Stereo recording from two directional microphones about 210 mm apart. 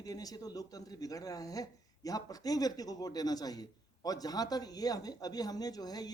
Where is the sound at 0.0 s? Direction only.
15° left (ahead or behind).